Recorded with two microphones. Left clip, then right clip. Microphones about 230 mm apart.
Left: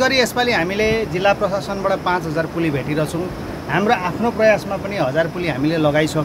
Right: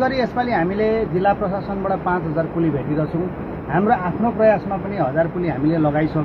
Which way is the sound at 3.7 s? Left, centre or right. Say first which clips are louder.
Left 1 dB; left.